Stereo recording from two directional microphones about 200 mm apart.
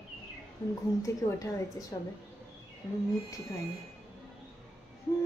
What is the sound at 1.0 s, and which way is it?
Speech, 15° left (ahead or behind).